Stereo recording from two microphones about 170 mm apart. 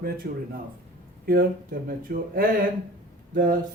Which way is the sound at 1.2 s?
65° right (ahead or behind).